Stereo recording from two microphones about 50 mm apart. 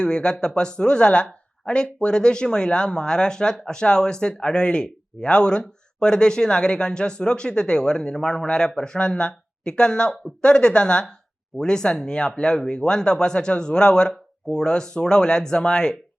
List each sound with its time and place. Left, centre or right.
0.0 s speech: centre